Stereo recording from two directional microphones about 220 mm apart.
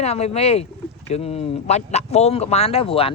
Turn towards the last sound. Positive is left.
turn(degrees=25)  # may be behind; listen again after turning